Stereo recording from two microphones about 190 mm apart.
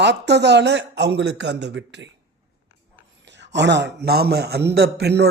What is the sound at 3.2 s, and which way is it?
A man's voice, 70° right (ahead or behind).